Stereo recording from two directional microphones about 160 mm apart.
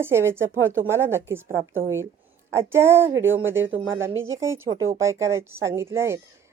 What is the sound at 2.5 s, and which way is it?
A woman's voice, 15° right (ahead or behind).